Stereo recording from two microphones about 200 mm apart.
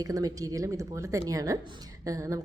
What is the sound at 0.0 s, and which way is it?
A woman's voice, 15° right (ahead or behind).